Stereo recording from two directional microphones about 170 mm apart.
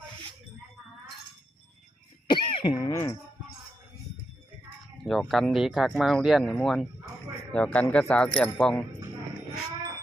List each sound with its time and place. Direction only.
2.2 s cough: 30° left (ahead or behind)
5.0 s speech: centre (ahead or behind)